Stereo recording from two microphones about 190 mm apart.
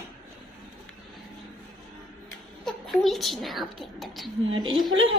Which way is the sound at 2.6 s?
Centre (ahead or behind).